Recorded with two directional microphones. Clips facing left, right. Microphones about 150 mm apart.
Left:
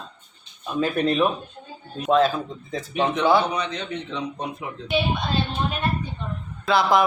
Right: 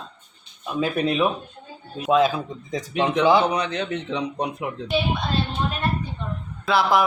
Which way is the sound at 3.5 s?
70° right (ahead or behind).